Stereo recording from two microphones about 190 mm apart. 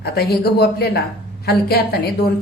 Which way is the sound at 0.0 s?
55° left (ahead or behind).